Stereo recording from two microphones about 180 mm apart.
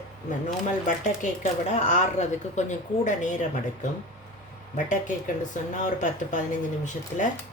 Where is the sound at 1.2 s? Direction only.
45° left (ahead or behind).